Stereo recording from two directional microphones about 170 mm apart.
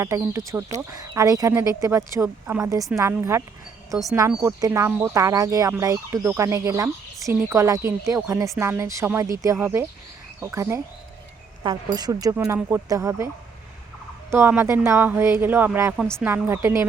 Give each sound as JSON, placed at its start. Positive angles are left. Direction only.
{"t": 0.0, "sound": "speech", "side_deg": -15}